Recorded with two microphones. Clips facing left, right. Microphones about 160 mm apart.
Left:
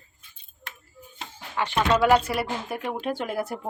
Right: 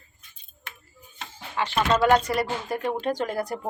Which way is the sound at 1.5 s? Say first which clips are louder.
Even; 15° left (ahead or behind).